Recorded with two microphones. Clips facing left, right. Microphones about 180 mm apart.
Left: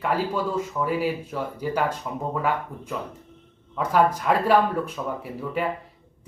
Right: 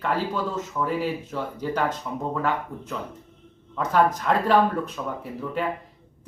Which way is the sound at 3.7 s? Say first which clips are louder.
Even; 10° left (ahead or behind).